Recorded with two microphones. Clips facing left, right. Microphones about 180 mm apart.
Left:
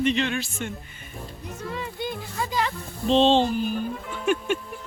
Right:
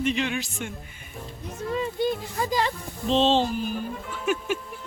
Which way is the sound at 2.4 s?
35° right (ahead or behind).